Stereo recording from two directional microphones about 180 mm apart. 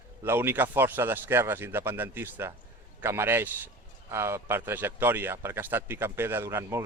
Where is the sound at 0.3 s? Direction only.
10° right (ahead or behind).